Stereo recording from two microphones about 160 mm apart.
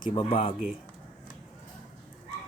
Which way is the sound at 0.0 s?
35° left (ahead or behind).